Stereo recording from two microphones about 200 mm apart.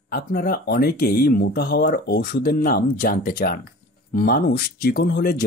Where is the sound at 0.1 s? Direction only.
50° left (ahead or behind).